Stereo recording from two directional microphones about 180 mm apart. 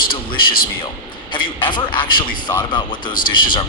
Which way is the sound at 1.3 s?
25° left (ahead or behind).